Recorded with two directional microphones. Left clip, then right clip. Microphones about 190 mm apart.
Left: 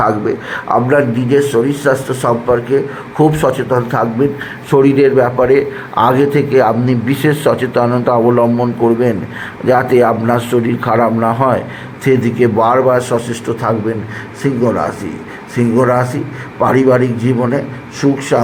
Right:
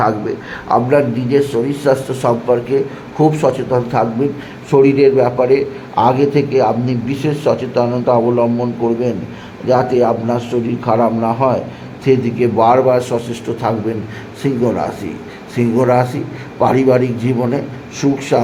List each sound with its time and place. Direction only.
0.0 s a man's voice: 10° left (ahead or behind)
12.0 s a man's voice: 10° left (ahead or behind)